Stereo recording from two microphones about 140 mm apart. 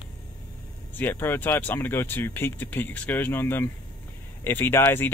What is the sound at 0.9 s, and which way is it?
Speech, 15° left (ahead or behind).